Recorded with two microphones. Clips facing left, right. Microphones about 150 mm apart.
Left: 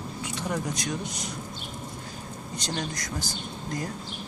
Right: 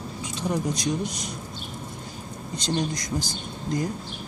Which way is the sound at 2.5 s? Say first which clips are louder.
Right 6 dB; 20° right (ahead or behind).